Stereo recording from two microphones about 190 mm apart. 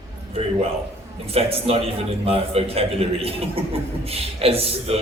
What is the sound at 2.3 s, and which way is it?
A man's voice, 30° right (ahead or behind).